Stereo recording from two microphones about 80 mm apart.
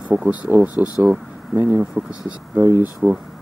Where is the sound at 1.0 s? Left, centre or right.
Right.